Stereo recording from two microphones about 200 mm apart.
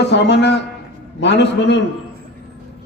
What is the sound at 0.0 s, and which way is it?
A man's voice, 60° left (ahead or behind).